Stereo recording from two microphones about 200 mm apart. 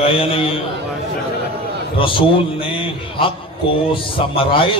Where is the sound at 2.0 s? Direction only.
25° left (ahead or behind).